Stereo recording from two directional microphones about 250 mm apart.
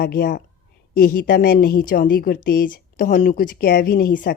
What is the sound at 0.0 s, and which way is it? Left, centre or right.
A woman's voice, left.